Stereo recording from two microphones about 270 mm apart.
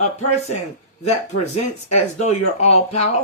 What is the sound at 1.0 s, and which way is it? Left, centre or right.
Speech, left.